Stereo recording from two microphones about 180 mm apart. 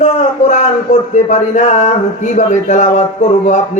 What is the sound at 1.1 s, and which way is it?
Speech, 40° left (ahead or behind).